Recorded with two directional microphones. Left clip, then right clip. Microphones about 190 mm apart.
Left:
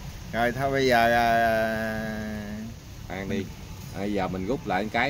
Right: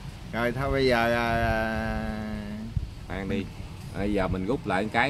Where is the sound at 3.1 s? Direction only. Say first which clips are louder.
Even; 40° right (ahead or behind).